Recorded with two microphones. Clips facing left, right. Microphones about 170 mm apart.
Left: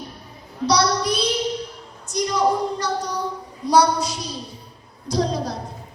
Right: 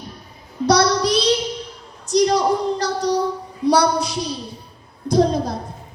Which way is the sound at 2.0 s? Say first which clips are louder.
Right 4 dB; 80° right.